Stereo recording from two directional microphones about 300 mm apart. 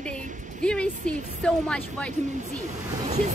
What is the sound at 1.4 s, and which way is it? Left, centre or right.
Speech, centre.